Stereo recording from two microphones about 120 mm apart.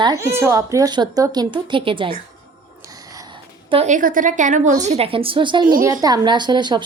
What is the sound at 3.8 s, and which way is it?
A woman's voice, 90° right.